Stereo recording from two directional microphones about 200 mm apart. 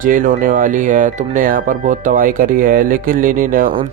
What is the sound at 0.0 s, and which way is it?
Speech, 40° right (ahead or behind).